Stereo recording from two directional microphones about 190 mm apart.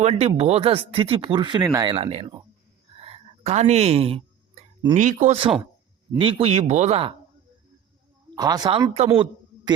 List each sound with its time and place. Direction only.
0.0 s speech: 35° right (ahead or behind)
2.0 s speech: 30° right (ahead or behind)
2.9 s a sound: 30° right (ahead or behind)
4.9 s speech: 40° right (ahead or behind)
8.4 s speech: 20° right (ahead or behind)